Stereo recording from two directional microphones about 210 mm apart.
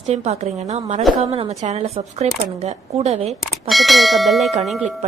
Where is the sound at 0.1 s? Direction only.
30° right (ahead or behind).